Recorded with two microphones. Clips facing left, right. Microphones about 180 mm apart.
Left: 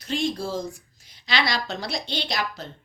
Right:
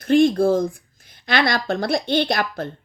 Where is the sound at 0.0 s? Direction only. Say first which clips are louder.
Right 12 dB; 55° right (ahead or behind).